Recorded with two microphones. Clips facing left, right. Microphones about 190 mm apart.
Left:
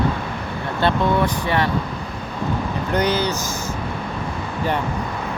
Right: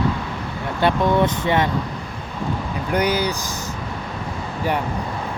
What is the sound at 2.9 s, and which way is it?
Speech, 10° right (ahead or behind).